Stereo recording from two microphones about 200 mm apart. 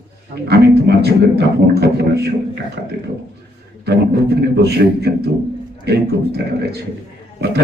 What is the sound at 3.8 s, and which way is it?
A man's voice, 55° right (ahead or behind).